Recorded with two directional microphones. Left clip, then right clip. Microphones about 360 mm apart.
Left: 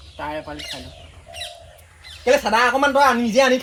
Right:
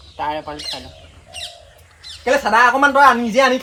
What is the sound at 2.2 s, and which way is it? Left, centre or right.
Speech, centre.